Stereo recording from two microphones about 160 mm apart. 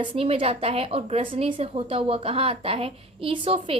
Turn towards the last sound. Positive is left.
turn(degrees=-35)  # may be behind; listen again after turning